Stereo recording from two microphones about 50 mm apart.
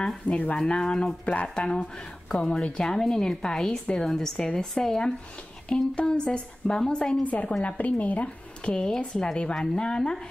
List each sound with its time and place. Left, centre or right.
0.3 s speech: left
0.7 s a woman's voice: centre
1.2 s speech: left
2.3 s a woman's voice: centre
7.2 s speech: left
8.7 s a woman's voice: centre